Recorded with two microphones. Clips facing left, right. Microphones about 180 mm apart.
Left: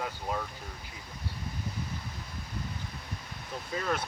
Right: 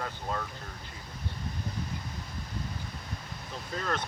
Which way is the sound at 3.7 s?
10° left (ahead or behind).